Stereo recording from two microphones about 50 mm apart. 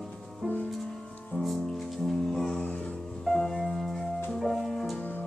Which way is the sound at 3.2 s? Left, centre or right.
Centre.